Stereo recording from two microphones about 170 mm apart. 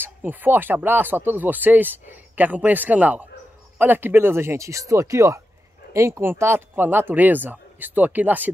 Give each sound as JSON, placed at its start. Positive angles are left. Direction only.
{"t": 0.0, "sound": "speech", "side_deg": -10}